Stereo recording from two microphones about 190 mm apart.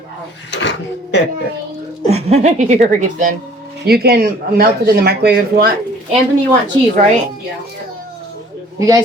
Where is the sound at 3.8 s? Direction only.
55° right (ahead or behind).